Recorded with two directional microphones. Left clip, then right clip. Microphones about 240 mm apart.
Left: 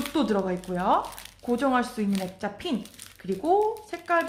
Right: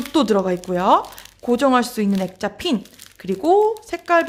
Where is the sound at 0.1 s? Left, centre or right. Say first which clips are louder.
Right 10 dB; right.